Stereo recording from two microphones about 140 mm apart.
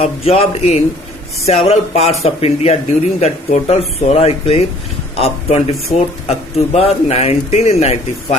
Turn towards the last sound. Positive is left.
turn(degrees=50)  # may be behind; listen again after turning